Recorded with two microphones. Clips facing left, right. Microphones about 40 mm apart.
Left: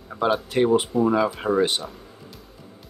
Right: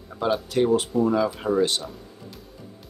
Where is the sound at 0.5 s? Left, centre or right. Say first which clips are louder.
Even; left.